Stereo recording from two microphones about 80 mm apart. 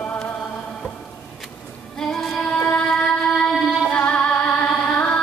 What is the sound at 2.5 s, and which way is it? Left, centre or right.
Music, centre.